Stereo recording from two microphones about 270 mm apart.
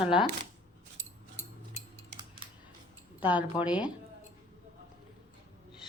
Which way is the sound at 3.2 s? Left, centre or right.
Centre.